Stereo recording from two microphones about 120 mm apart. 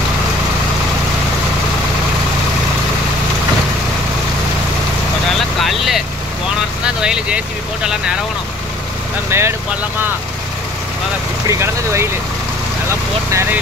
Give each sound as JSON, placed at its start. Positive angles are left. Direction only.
{"t": 5.6, "sound": "vehicle", "side_deg": 0}
{"t": 7.0, "sound": "speech", "side_deg": -10}
{"t": 9.3, "sound": "speech", "side_deg": -20}
{"t": 11.4, "sound": "speech", "side_deg": -20}
{"t": 13.3, "sound": "speech", "side_deg": -20}